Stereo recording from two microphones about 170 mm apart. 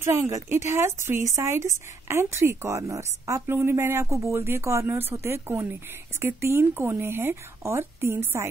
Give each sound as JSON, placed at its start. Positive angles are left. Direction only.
{"t": 0.0, "sound": "speech", "side_deg": -15}